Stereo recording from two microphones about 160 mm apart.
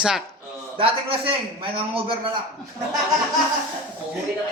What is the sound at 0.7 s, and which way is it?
A man's voice, 35° right (ahead or behind).